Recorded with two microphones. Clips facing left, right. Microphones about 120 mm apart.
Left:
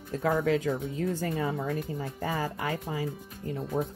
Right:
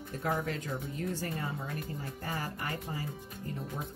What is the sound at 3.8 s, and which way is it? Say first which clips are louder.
Speech: left 10 dB; 90° left.